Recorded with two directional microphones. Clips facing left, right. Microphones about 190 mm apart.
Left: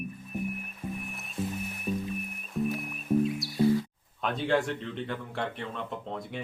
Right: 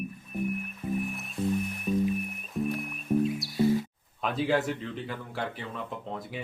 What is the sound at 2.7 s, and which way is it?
Music, centre (ahead or behind).